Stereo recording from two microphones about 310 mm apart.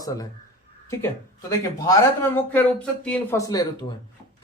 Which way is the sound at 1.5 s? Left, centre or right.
Centre.